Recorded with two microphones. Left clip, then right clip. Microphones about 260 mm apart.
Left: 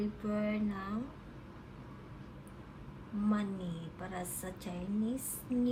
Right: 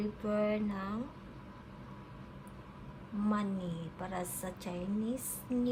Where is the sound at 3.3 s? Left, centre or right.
Centre.